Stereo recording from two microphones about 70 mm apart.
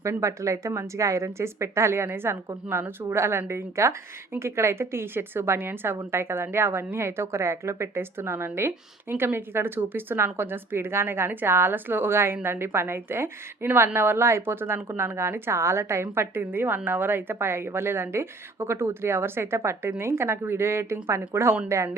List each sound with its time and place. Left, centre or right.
0.0 s a woman's voice: right